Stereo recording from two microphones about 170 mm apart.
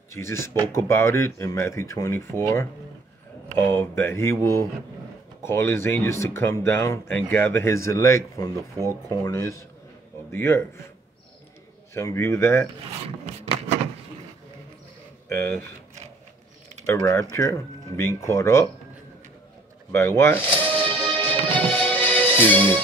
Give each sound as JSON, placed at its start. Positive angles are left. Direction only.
{"t": 0.1, "sound": "speech", "side_deg": 15}
{"t": 3.7, "sound": "speech", "side_deg": 15}
{"t": 11.9, "sound": "speech", "side_deg": 15}
{"t": 15.2, "sound": "speech", "side_deg": 10}
{"t": 16.8, "sound": "speech", "side_deg": 15}
{"t": 19.9, "sound": "speech", "side_deg": 15}
{"t": 21.1, "sound": "music", "side_deg": 10}